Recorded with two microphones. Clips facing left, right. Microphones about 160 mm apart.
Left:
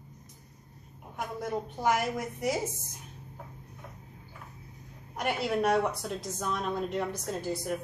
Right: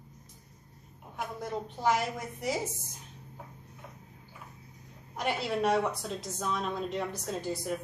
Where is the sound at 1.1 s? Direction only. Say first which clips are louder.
Left 2 dB; 5° left (ahead or behind).